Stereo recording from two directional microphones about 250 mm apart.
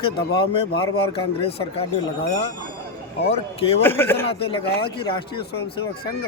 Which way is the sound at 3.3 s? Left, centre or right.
Left.